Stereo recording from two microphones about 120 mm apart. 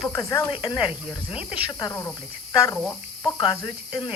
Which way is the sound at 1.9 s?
25° left (ahead or behind).